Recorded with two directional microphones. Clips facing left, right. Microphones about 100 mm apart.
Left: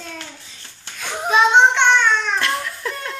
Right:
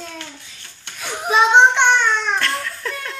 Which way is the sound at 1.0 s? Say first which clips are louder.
Even; 5° right (ahead or behind).